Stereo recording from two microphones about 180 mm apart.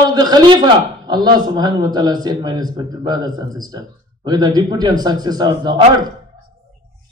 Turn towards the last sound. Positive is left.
turn(degrees=-25)  # may be behind; listen again after turning